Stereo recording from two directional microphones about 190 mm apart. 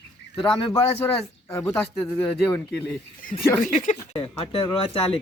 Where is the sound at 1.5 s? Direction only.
15° left (ahead or behind).